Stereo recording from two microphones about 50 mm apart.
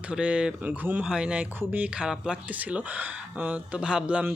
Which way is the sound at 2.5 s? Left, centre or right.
Right.